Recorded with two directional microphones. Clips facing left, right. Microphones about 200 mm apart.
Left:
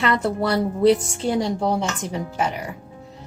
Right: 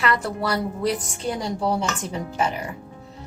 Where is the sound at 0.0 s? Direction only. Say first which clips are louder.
Left 3 dB; 25° left (ahead or behind).